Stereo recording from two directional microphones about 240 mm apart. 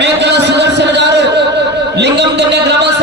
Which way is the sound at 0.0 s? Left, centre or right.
Right.